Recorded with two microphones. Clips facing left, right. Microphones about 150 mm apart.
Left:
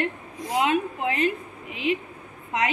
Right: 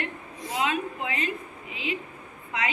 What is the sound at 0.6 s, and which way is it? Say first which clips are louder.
Speech: left 4 dB; 55° left (ahead or behind).